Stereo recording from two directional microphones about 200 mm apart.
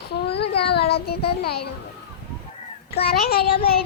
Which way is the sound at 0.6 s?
55° left (ahead or behind).